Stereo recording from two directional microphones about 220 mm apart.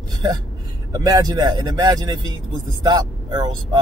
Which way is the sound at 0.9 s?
15° right (ahead or behind).